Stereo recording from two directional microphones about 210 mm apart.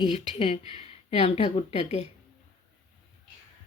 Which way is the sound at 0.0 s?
25° left (ahead or behind).